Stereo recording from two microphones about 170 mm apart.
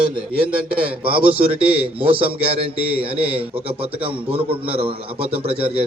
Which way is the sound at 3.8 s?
35° right (ahead or behind).